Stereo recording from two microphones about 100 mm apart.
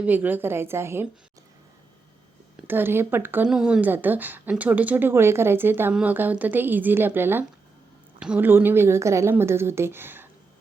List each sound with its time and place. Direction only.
0.0 s a woman's voice: 15° right (ahead or behind)
2.6 s a woman's voice: 20° right (ahead or behind)
3.4 s a woman's voice: 10° right (ahead or behind)
8.2 s a woman's voice: 10° right (ahead or behind)
8.4 s a woman's voice: 20° right (ahead or behind)